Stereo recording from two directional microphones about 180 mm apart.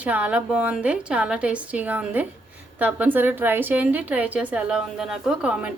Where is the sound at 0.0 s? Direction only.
10° right (ahead or behind).